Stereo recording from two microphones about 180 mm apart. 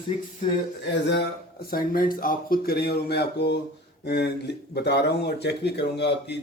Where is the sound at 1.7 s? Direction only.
50° left (ahead or behind).